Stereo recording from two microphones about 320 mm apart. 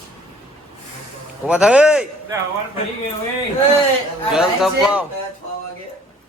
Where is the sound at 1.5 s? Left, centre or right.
Centre.